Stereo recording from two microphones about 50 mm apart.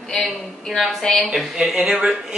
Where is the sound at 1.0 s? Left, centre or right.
Centre.